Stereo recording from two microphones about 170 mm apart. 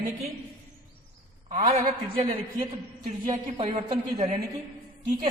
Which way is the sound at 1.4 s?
40° right (ahead or behind).